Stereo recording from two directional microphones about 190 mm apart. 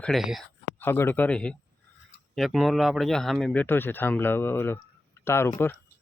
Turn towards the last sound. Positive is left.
turn(degrees=15)  # may be behind; listen again after turning